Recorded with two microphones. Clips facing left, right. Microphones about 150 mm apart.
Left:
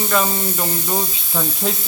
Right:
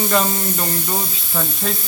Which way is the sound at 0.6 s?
5° left (ahead or behind).